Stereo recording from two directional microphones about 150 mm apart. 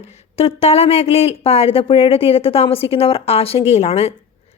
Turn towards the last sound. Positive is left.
turn(degrees=45)  # may be behind; listen again after turning